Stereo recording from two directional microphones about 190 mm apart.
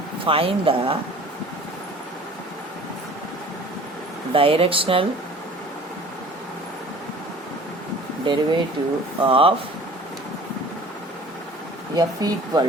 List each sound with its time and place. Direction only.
0.3 s speech: 30° right (ahead or behind)
4.3 s speech: 30° right (ahead or behind)
8.2 s speech: 25° right (ahead or behind)
11.9 s speech: 20° right (ahead or behind)